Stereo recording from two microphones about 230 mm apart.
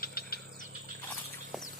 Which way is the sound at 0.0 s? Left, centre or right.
Left.